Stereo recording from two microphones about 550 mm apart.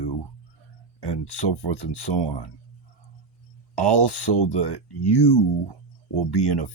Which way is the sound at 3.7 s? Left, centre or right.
Left.